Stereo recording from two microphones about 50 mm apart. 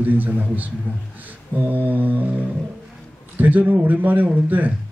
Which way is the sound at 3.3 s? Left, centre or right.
Right.